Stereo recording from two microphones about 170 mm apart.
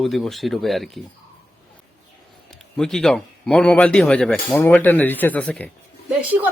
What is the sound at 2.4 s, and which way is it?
Speech, 5° left (ahead or behind).